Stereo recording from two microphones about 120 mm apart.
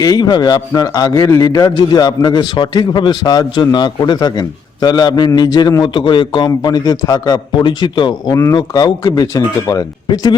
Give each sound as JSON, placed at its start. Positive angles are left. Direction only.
{"t": 0.0, "sound": "a man's voice", "side_deg": 30}